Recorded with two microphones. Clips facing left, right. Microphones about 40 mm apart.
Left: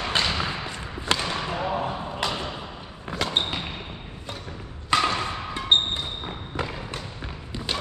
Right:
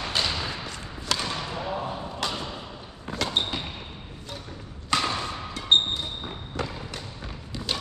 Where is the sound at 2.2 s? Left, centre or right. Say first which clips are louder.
Left 2 dB; centre.